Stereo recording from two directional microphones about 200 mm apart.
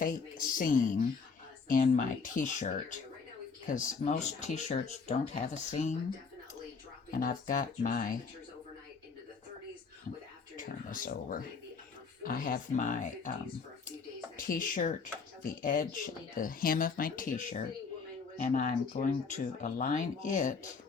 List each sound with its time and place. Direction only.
0.0 s speech: 45° left (ahead or behind)
7.1 s speech: 45° left (ahead or behind)
10.6 s speech: 40° left (ahead or behind)
14.3 s speech: 45° left (ahead or behind)
18.4 s speech: 40° left (ahead or behind)